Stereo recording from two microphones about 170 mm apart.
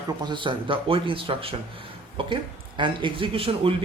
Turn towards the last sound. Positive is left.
turn(degrees=-35)  # may be behind; listen again after turning